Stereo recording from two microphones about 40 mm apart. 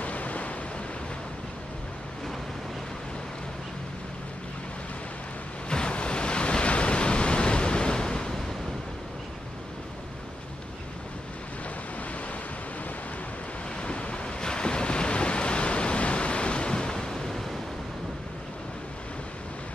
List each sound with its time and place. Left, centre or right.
0.0 s waves: left
5.7 s waves: left
13.7 s waves: left; by 17.6 s centre